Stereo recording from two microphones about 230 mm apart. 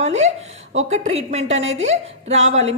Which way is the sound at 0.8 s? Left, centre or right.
Right.